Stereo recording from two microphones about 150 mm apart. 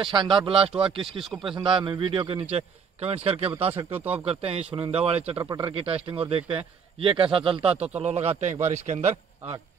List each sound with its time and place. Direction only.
0.0 s a man's voice: 30° right (ahead or behind)
5.4 s speech: 25° right (ahead or behind)
5.7 s a man's voice: 40° right (ahead or behind)
7.7 s a man's voice: 10° right (ahead or behind)
8.0 s a man's voice: 45° right (ahead or behind)